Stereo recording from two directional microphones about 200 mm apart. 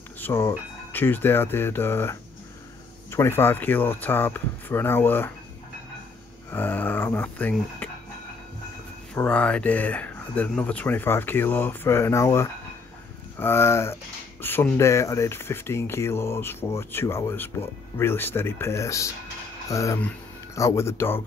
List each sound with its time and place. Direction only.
0.2 s speech: 15° left (ahead or behind)
6.5 s speech: 10° left (ahead or behind)
9.1 s speech: 5° left (ahead or behind)